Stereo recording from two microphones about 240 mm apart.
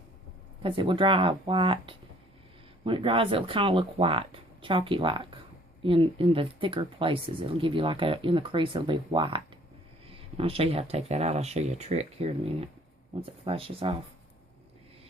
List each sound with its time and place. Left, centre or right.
0.6 s speech: right